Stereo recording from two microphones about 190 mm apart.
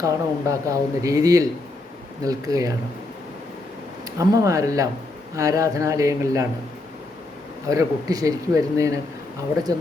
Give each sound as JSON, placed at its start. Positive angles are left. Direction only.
{"t": 0.0, "sound": "speech", "side_deg": -15}
{"t": 4.2, "sound": "speech", "side_deg": -15}
{"t": 7.7, "sound": "speech", "side_deg": -20}